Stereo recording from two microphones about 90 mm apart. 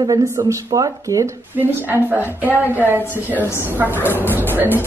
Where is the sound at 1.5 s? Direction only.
20° right (ahead or behind).